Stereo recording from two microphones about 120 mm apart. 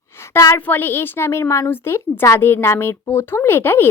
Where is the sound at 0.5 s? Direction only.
15° left (ahead or behind).